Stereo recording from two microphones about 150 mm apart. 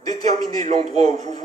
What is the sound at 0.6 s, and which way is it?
Speech, 50° right (ahead or behind).